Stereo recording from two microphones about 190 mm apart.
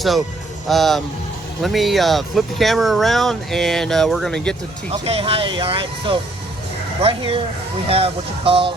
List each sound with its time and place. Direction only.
0.7 s speech: centre (ahead or behind)
4.9 s speech: 30° right (ahead or behind)